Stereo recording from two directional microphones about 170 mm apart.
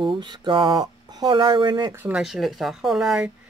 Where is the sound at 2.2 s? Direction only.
Centre (ahead or behind).